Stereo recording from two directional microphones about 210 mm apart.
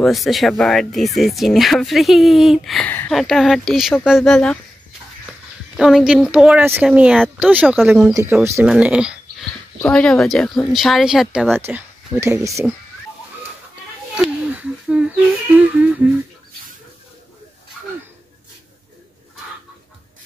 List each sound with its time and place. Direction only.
0.0 s speech: centre (ahead or behind)
5.8 s speech: centre (ahead or behind)
8.1 s music: 15° right (ahead or behind)
8.6 s speech: 5° right (ahead or behind)
14.1 s a sound: 5° right (ahead or behind)
15.5 s music: 5° right (ahead or behind)